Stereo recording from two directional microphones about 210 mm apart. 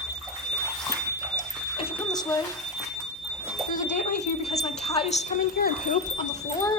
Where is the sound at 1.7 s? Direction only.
20° left (ahead or behind).